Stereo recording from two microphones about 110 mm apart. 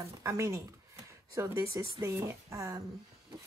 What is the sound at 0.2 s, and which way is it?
Speech, 30° right (ahead or behind).